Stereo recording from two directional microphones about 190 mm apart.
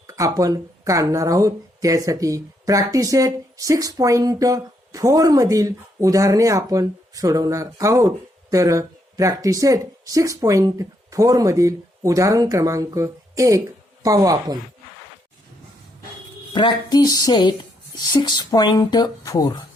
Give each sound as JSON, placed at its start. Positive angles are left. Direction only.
{"t": 0.1, "sound": "a woman's voice", "side_deg": -15}
{"t": 16.5, "sound": "speech", "side_deg": 25}